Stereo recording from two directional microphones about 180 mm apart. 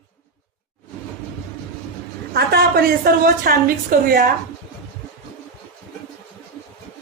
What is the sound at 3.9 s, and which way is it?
Speech, 50° right (ahead or behind).